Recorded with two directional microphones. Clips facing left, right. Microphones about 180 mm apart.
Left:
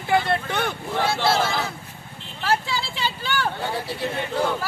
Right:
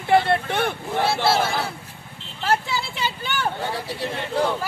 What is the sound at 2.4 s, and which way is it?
Vehicle, 20° right (ahead or behind).